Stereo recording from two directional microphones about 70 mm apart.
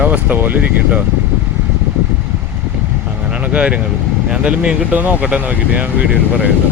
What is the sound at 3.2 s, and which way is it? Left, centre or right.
Speech, centre.